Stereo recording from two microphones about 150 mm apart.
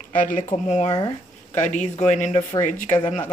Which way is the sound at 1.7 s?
55° left (ahead or behind).